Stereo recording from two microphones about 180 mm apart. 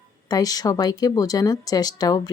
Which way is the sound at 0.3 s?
20° left (ahead or behind).